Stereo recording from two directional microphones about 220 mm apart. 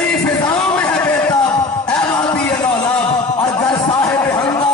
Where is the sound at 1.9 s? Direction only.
5° left (ahead or behind).